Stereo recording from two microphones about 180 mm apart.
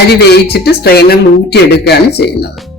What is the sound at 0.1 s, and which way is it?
Speech, 65° left (ahead or behind).